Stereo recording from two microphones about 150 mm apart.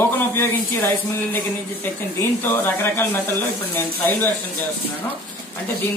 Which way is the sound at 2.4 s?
15° left (ahead or behind).